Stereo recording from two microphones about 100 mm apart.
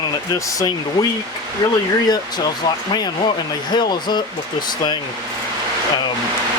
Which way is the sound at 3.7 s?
45° left (ahead or behind).